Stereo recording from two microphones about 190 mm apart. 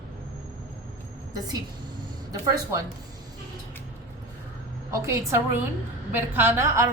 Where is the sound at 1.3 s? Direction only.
20° right (ahead or behind).